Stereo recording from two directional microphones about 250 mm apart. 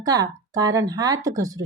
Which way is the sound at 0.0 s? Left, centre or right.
Centre.